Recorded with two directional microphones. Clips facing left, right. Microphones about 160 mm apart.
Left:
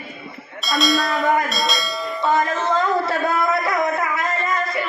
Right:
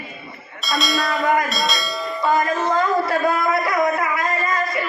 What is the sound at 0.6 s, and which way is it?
Bell, centre (ahead or behind).